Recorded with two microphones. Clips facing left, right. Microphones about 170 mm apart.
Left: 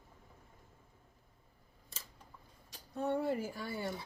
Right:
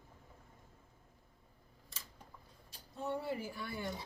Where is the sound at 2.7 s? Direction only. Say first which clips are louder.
Left 5 dB; 60° left (ahead or behind); by 3.7 s 40° left (ahead or behind).